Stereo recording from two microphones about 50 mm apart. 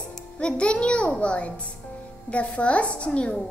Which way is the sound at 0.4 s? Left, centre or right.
Left.